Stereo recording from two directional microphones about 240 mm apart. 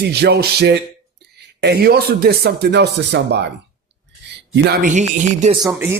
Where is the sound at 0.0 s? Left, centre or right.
Right.